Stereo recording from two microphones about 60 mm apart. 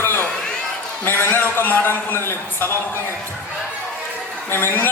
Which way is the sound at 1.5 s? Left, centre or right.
Left.